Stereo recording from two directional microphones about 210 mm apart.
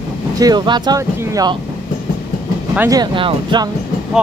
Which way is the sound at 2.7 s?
15° right (ahead or behind).